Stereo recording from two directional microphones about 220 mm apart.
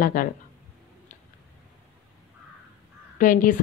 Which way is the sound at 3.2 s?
35° left (ahead or behind).